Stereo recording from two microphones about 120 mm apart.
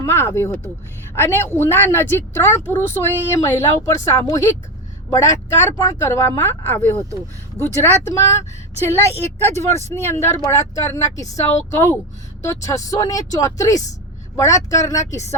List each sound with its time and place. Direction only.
0.0 s a woman's voice: 20° left (ahead or behind)
9.5 s a woman's voice: 25° left (ahead or behind)